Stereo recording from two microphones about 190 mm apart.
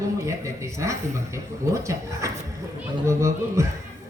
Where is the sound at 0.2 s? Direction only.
15° right (ahead or behind).